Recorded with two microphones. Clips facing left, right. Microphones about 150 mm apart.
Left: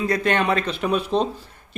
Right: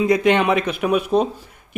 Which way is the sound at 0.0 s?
15° right (ahead or behind).